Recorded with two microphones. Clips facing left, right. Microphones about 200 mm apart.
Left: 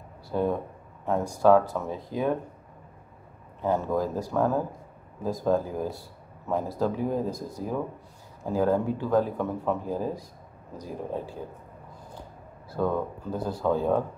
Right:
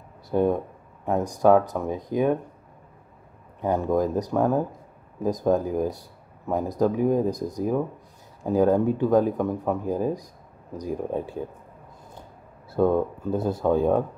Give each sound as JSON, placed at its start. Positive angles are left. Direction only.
{"t": 0.3, "sound": "speech", "side_deg": -15}
{"t": 3.6, "sound": "speech", "side_deg": -15}
{"t": 12.7, "sound": "speech", "side_deg": -25}